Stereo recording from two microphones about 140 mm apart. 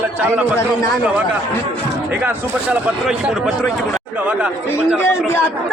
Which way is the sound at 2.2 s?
10° right (ahead or behind).